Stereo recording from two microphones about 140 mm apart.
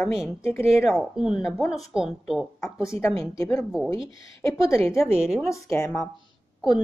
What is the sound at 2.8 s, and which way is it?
Speech, 20° left (ahead or behind).